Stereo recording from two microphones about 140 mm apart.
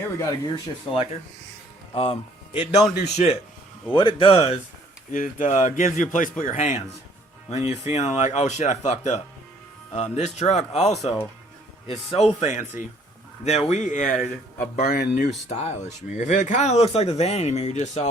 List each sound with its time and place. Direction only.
0.0 s speech: 20° left (ahead or behind)
1.9 s speech: 45° left (ahead or behind)
3.9 s speech: 35° left (ahead or behind)
5.1 s speech: 65° left (ahead or behind); by 10.9 s 50° left (ahead or behind)
12.1 s speech: 55° left (ahead or behind)